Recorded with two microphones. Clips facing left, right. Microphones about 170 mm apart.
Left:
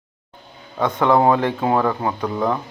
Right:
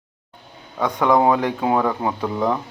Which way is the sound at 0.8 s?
10° right (ahead or behind).